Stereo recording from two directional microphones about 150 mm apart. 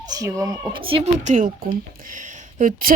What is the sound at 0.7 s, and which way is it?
Speech, 35° right (ahead or behind).